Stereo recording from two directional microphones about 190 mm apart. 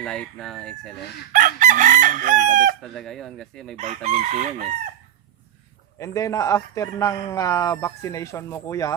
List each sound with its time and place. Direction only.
0.0 s speech: 5° left (ahead or behind)
1.3 s chicken: 45° right (ahead or behind)
2.8 s speech: centre (ahead or behind)
3.8 s chicken: 35° right (ahead or behind)
6.0 s speech: 15° left (ahead or behind)